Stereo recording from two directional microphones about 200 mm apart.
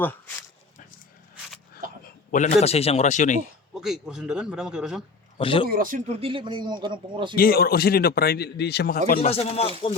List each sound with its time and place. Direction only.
2.3 s speech: 40° left (ahead or behind)
3.8 s a man's voice: centre (ahead or behind)
5.4 s speech: 25° left (ahead or behind)
5.6 s speech: 45° right (ahead or behind)
6.1 s a man's voice: 25° right (ahead or behind)
7.3 s speech: 50° left (ahead or behind)
9.2 s speech: 30° left (ahead or behind)